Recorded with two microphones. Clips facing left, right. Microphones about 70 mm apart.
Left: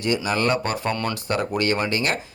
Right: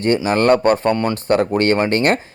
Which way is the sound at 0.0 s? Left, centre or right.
Right.